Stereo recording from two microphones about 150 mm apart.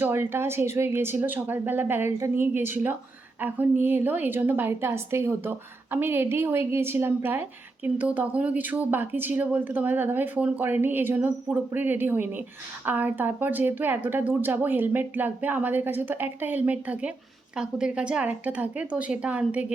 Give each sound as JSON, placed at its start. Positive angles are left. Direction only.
{"t": 0.0, "sound": "speech", "side_deg": -15}